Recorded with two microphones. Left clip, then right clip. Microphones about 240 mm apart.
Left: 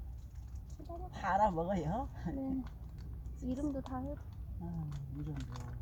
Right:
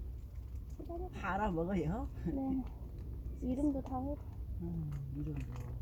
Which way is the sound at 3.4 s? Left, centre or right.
Left.